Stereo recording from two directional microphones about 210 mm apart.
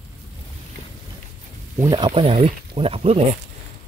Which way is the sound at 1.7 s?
20° right (ahead or behind).